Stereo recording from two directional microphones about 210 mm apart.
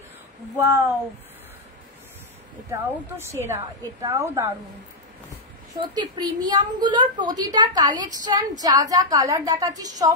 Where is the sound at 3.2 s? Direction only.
10° right (ahead or behind).